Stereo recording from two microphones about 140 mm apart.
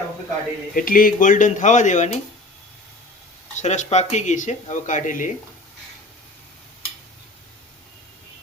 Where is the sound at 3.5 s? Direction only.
60° left (ahead or behind).